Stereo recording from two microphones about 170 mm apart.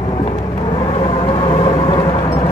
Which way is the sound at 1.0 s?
35° left (ahead or behind).